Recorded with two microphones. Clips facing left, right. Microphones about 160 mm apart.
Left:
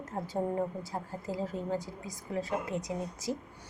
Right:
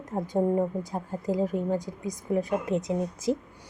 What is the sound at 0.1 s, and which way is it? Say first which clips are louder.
A woman's voice: right 8 dB; 20° right (ahead or behind).